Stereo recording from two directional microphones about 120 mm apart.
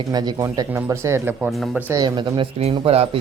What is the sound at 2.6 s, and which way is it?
Speech, 55° right (ahead or behind).